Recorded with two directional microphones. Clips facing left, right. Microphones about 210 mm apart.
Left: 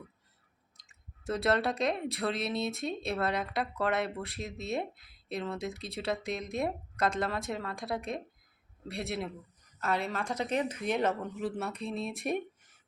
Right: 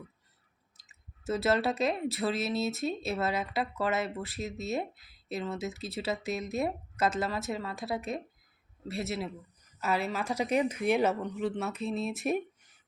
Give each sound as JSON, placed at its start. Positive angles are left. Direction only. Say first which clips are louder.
{"t": 0.8, "sound": "a woman's voice", "louder": "left 1 dB", "side_deg": -5}
{"t": 11.2, "sound": "speech", "louder": "right 2 dB", "side_deg": 0}